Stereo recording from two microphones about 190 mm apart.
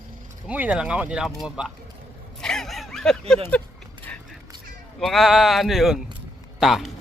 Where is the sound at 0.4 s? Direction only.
5° right (ahead or behind).